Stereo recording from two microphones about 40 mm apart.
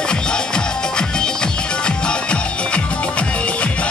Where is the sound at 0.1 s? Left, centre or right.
Left.